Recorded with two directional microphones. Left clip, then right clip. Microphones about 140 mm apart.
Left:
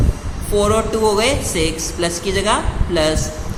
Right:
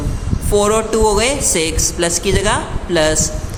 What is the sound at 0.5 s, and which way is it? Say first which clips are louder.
A woman's voice: right 2 dB; 35° right (ahead or behind).